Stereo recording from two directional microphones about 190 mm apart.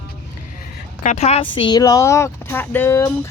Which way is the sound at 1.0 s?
35° left (ahead or behind).